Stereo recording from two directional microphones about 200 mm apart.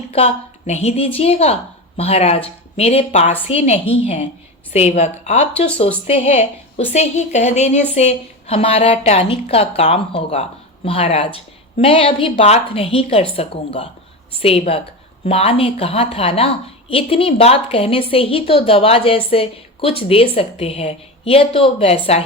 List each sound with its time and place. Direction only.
0.6 s a woman's voice: 30° left (ahead or behind)